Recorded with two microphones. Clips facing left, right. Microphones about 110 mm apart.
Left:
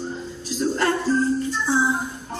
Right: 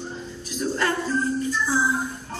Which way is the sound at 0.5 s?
35° left (ahead or behind).